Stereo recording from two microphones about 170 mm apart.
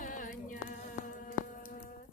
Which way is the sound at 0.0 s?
50° left (ahead or behind).